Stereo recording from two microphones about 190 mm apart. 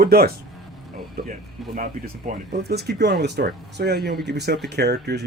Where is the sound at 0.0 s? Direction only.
55° right (ahead or behind).